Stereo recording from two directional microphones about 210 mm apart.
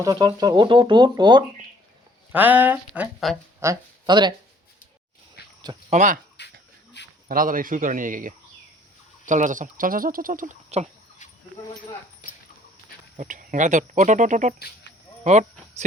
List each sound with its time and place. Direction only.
0.0 s speech: 20° right (ahead or behind)
2.3 s speech: 10° right (ahead or behind)
3.6 s speech: 15° right (ahead or behind)
5.4 s a sound: 50° left (ahead or behind)
5.9 s speech: 35° right (ahead or behind)
6.4 s a sound: 55° left (ahead or behind)
7.3 s speech: 40° right (ahead or behind)
12.2 s a sound: 40° left (ahead or behind)
13.1 s speech: 40° right (ahead or behind)